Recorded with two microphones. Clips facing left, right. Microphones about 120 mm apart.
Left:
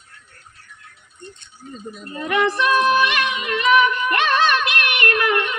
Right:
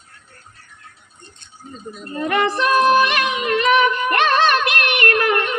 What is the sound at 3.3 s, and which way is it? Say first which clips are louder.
Music: right 1 dB; 45° right (ahead or behind).